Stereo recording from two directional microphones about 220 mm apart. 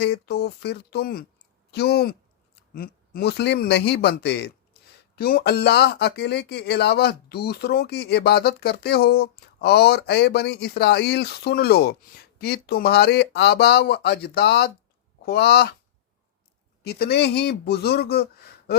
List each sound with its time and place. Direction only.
0.0 s speech: 50° left (ahead or behind)
16.8 s speech: 45° left (ahead or behind)